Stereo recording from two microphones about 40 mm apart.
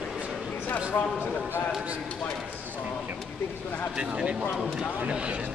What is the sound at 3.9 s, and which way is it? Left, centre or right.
Speech, right.